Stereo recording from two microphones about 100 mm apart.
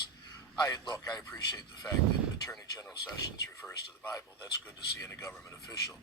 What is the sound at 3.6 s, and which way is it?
Speech, 20° left (ahead or behind).